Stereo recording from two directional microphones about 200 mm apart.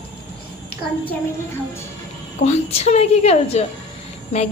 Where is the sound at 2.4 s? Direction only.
30° left (ahead or behind).